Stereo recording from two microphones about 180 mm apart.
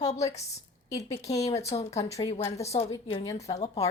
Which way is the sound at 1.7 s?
30° left (ahead or behind).